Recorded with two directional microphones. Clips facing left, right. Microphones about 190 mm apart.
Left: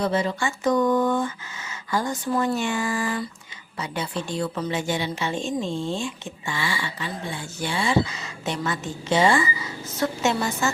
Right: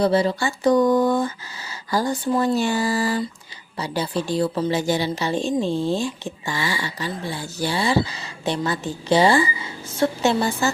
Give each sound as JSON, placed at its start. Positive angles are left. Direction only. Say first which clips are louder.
{"t": 0.0, "sound": "a woman's voice", "louder": "right 5 dB", "side_deg": -35}